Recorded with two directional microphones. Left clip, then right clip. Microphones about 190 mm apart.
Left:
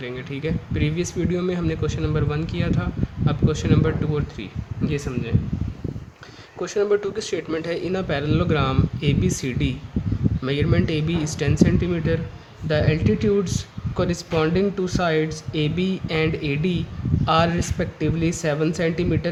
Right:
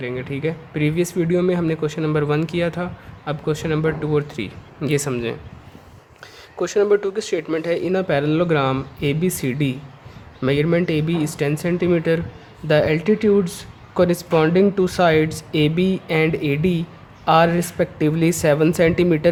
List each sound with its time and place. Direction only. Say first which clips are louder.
0.0 s speech: right 4 dB; 20° right (ahead or behind)
4.9 s speech: right 7 dB; 40° right (ahead or behind)
6.6 s speech: right 4 dB; 30° right (ahead or behind)